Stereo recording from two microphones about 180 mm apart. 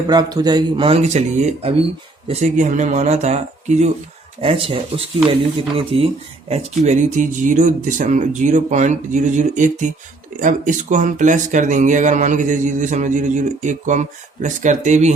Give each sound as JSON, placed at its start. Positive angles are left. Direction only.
{"t": 0.1, "sound": "speech", "side_deg": -20}
{"t": 6.8, "sound": "speech", "side_deg": -40}